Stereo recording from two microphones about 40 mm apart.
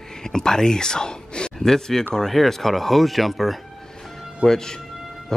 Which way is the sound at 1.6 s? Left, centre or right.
Centre.